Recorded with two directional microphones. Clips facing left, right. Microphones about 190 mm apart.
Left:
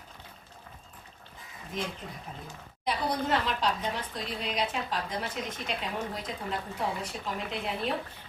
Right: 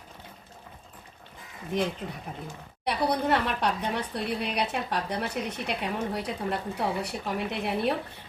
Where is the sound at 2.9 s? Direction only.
65° right (ahead or behind).